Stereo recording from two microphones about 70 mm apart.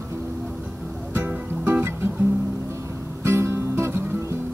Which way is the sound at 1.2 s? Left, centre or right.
Right.